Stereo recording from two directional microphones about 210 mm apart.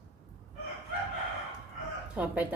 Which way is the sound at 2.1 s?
5° right (ahead or behind).